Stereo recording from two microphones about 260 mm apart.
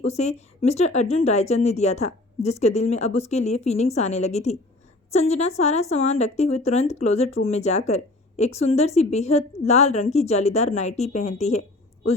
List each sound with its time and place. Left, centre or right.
0.0 s speech: left